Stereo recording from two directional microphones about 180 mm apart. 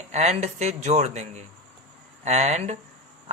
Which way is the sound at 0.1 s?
40° right (ahead or behind).